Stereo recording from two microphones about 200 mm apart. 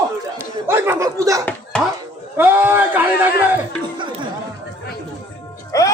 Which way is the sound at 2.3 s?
10° right (ahead or behind).